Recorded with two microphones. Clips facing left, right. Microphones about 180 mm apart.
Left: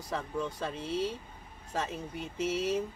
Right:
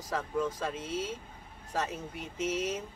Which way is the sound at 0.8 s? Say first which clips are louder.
Left 3 dB; 45° right (ahead or behind).